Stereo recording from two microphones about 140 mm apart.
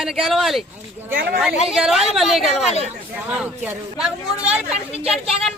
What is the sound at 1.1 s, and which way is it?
Speech, 90° right.